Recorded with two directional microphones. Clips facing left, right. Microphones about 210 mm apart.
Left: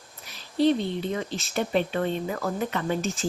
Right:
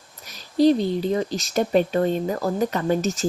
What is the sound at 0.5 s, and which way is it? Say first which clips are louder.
Speech: right 5 dB; 40° right (ahead or behind).